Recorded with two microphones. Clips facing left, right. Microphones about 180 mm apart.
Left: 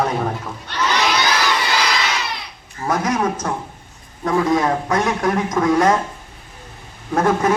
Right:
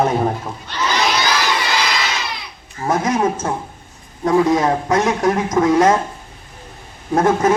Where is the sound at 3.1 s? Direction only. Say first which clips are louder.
Right 2 dB; 25° right (ahead or behind).